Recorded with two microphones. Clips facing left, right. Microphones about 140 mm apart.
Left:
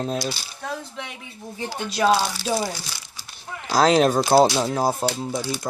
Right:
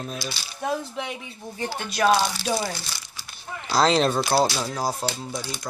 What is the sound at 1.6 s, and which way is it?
A woman's voice, 15° left (ahead or behind).